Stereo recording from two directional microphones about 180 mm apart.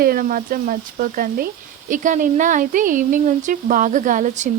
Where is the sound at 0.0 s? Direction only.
55° right (ahead or behind).